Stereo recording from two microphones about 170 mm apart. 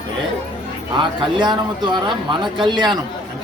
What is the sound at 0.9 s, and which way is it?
A man's voice, 30° right (ahead or behind).